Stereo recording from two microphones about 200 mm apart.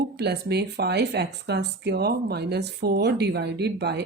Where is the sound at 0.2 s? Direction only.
55° right (ahead or behind).